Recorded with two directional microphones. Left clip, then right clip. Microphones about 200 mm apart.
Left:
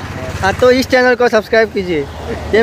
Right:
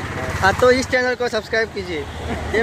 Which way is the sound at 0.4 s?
10° left (ahead or behind).